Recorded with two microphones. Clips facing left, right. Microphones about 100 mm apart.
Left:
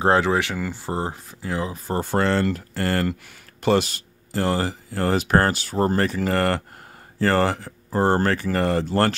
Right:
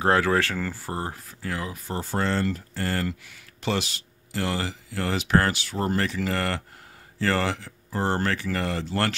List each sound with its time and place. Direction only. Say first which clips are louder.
0.0 s speech: left 2 dB; 25° left (ahead or behind)
1.9 s speech: left 5 dB; 60° left (ahead or behind); by 9.1 s 40° left (ahead or behind)